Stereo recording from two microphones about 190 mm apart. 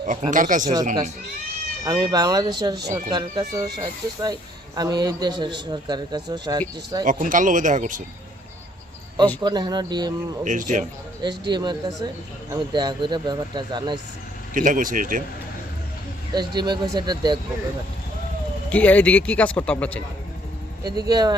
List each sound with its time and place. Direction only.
0.1 s speech: 45° right (ahead or behind)
0.6 s speech: 20° right (ahead or behind)
7.0 s speech: 45° right (ahead or behind)
9.4 s speech: 20° right (ahead or behind)
10.4 s speech: 40° right (ahead or behind)
11.2 s speech: 25° right (ahead or behind)
14.5 s speech: 45° right (ahead or behind)
16.3 s speech: 20° right (ahead or behind)
18.7 s speech: 10° left (ahead or behind)
20.8 s speech: 20° right (ahead or behind)